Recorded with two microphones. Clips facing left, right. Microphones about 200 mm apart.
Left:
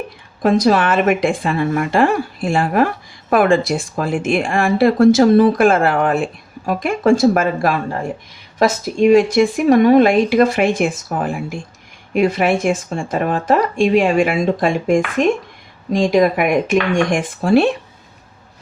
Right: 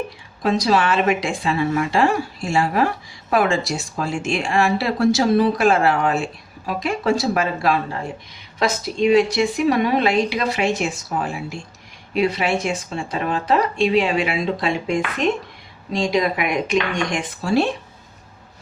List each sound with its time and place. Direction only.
0.4 s a woman's voice: 50° left (ahead or behind)